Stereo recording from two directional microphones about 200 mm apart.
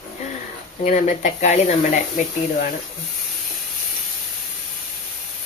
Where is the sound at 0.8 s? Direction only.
35° left (ahead or behind).